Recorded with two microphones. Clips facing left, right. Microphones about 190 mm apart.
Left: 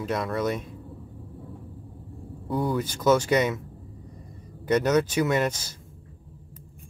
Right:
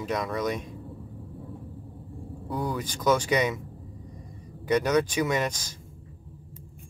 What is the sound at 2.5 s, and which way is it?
Speech, centre (ahead or behind).